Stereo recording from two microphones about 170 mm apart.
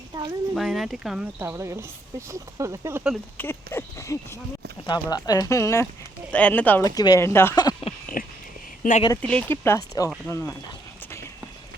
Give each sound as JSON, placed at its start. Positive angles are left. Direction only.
{"t": 0.1, "sound": "speech", "side_deg": -25}
{"t": 0.5, "sound": "speech", "side_deg": 0}
{"t": 3.3, "sound": "speech", "side_deg": 10}
{"t": 6.8, "sound": "speech", "side_deg": 20}
{"t": 8.2, "sound": "a sound", "side_deg": 55}
{"t": 8.8, "sound": "speech", "side_deg": 45}
{"t": 9.2, "sound": "speech", "side_deg": 5}